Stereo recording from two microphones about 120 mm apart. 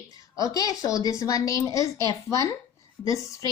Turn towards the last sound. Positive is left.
turn(degrees=25)  # may be behind; listen again after turning